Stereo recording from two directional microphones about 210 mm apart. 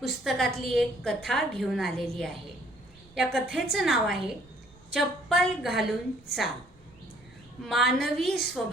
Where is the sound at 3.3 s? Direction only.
45° left (ahead or behind).